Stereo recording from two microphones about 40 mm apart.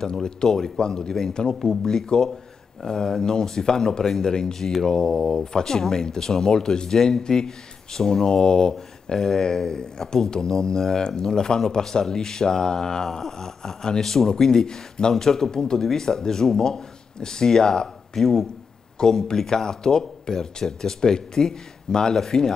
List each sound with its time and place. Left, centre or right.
0.0 s speech: centre
18.9 s speech: centre